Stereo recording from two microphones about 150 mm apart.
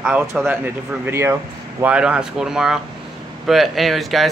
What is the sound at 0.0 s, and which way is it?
Speech, 10° right (ahead or behind).